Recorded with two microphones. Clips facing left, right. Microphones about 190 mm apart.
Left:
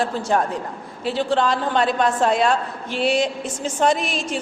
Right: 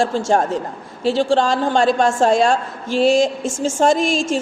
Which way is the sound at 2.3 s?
45° right (ahead or behind).